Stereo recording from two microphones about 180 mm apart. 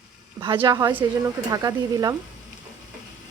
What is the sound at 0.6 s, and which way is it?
Speech, 20° right (ahead or behind).